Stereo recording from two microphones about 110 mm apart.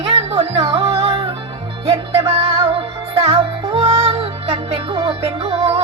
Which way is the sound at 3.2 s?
65° right (ahead or behind).